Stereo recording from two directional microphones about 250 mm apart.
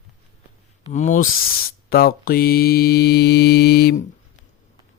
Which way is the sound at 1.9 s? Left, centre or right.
Left.